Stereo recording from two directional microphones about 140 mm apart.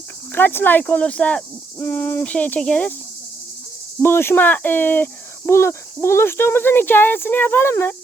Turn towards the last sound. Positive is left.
turn(degrees=15)  # may be behind; listen again after turning